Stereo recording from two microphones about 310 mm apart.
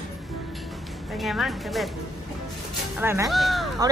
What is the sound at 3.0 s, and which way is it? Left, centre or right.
Speech, centre.